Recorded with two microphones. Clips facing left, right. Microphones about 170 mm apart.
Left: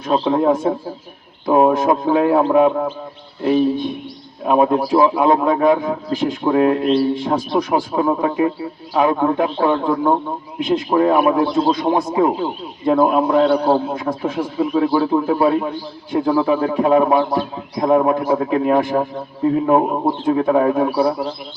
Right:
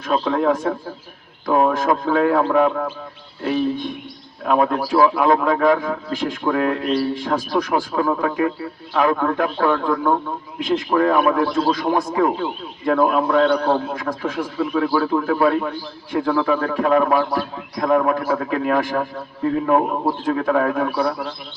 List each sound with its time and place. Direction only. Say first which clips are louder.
0.1 s a man's voice: left 3 dB; 25° left (ahead or behind)
3.4 s speech: left 5 dB; centre (ahead or behind)
4.4 s a man's voice: left 3 dB; 15° left (ahead or behind)